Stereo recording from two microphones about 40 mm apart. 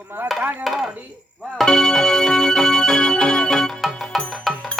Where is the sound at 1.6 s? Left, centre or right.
Centre.